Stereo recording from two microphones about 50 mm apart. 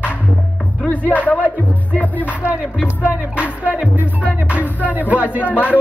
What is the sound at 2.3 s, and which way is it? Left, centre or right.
Music, right.